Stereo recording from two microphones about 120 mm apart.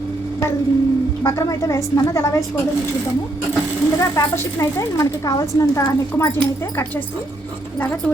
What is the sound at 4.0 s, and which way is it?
Speech, 25° left (ahead or behind).